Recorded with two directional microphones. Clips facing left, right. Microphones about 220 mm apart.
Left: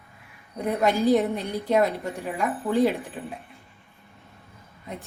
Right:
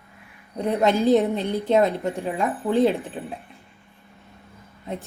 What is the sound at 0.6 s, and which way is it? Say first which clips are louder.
Speech: right 2 dB; 25° right (ahead or behind).